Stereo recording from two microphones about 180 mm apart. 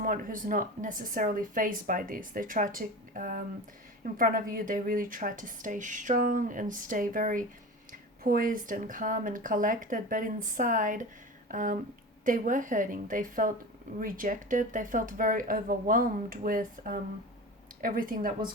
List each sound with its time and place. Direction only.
0.0 s speech: 50° right (ahead or behind)